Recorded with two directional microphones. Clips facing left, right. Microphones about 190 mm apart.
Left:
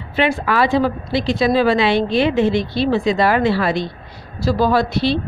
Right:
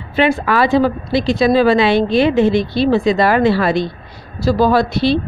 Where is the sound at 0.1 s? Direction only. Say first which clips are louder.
Right 3 dB; 40° right (ahead or behind).